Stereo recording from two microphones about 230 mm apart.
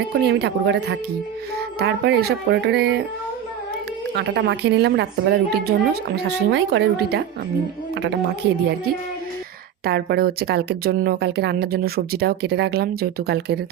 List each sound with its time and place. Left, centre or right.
0.1 s speech: right
4.1 s speech: right
9.8 s speech: right